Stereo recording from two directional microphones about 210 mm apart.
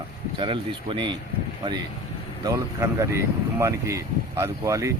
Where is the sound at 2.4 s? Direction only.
15° right (ahead or behind).